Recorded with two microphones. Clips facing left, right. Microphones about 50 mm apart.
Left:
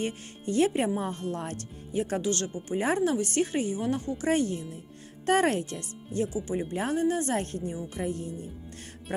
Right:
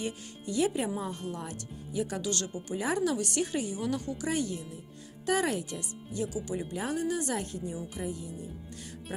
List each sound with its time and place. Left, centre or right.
0.0 s speech: left